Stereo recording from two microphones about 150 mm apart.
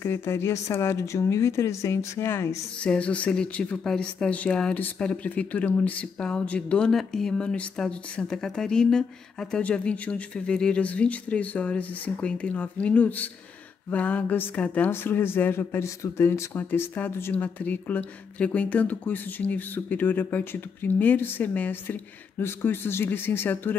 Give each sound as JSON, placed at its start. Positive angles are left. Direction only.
{"t": 0.0, "sound": "speech", "side_deg": 15}